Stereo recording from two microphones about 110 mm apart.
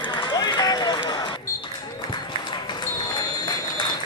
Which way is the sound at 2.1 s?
40° left (ahead or behind).